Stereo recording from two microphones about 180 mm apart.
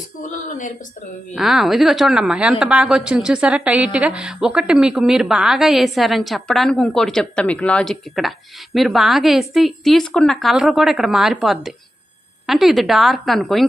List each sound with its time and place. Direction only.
0.2 s speech: 45° left (ahead or behind)
1.4 s a woman's voice: centre (ahead or behind)